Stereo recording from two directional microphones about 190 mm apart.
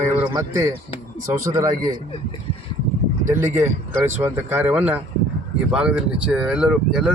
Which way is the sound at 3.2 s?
10° right (ahead or behind).